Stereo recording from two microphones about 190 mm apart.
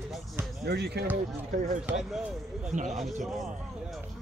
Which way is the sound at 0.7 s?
60° right (ahead or behind).